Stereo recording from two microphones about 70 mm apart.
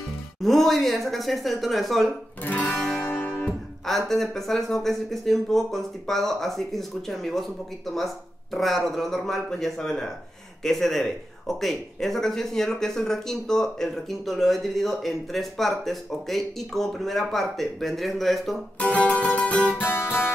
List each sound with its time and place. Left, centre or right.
0.4 s speech: centre
2.4 s music: left
3.0 s music: left
3.8 s speech: centre
18.8 s music: left
19.8 s music: left